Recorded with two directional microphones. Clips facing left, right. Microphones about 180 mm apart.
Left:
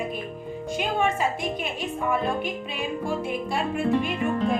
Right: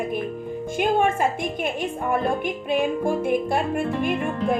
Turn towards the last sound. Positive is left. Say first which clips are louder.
# right 1 dB
turn(degrees=-50)  # may be behind; listen again after turning